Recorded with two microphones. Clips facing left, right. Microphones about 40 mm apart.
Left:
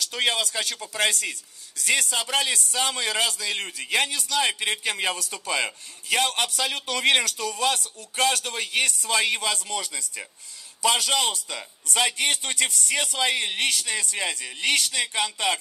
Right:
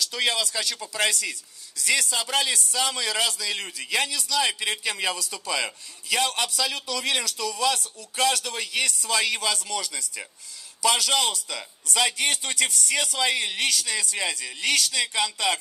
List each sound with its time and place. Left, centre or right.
0.0 s a man's voice: left